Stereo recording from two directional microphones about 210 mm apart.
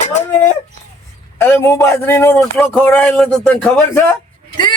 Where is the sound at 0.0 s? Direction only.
30° left (ahead or behind).